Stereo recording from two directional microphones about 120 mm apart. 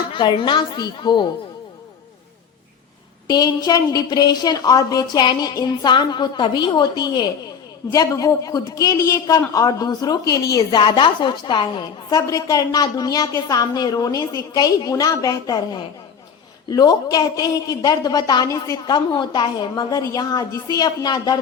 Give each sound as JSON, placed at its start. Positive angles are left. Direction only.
{"t": 0.1, "sound": "a woman's voice", "side_deg": 45}
{"t": 3.2, "sound": "a woman's voice", "side_deg": 35}